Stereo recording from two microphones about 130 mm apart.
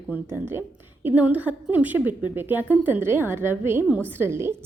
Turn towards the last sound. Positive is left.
turn(degrees=-20)  # may be behind; listen again after turning